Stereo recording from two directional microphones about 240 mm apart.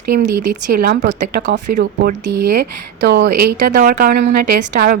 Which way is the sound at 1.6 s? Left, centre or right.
Right.